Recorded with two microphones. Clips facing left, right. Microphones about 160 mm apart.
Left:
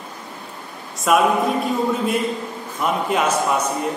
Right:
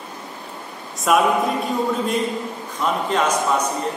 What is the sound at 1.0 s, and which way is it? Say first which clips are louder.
Mantra: left 1 dB; centre (ahead or behind).